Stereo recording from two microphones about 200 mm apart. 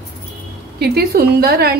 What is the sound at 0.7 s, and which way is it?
A woman's voice, 55° right (ahead or behind).